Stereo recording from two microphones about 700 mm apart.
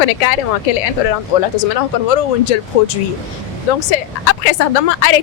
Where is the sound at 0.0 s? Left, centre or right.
Left.